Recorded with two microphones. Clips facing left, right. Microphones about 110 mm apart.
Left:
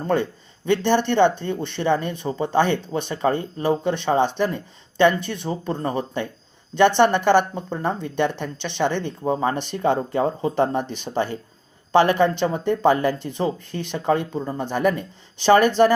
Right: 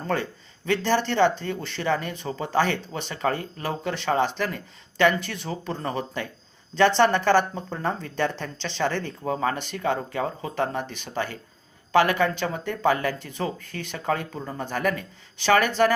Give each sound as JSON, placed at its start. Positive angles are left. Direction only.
{"t": 0.0, "sound": "a man's voice", "side_deg": 20}